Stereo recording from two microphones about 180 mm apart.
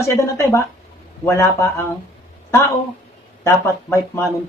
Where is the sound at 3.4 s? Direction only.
15° left (ahead or behind).